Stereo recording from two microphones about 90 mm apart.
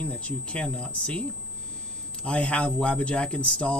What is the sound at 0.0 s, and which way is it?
Speech, 15° left (ahead or behind).